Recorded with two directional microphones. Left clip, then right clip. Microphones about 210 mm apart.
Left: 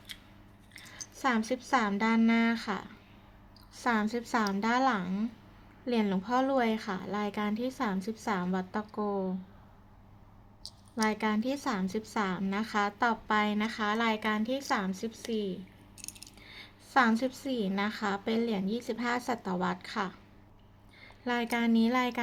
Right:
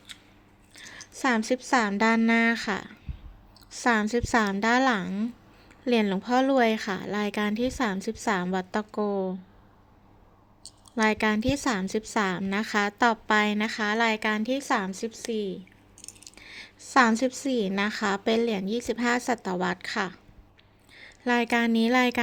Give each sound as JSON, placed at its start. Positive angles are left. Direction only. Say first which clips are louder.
{"t": 1.1, "sound": "a woman's voice", "louder": "right 5 dB", "side_deg": -35}
{"t": 10.9, "sound": "a woman's voice", "louder": "right 6 dB", "side_deg": -40}